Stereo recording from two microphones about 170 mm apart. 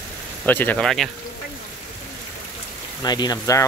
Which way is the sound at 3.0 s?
25° left (ahead or behind).